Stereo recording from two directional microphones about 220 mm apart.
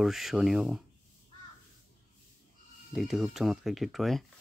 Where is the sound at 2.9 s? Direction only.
Centre (ahead or behind).